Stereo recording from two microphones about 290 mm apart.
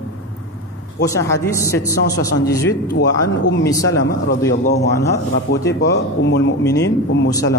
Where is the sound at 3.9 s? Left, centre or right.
Left.